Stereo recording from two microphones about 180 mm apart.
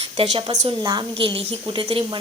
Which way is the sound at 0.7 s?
25° right (ahead or behind).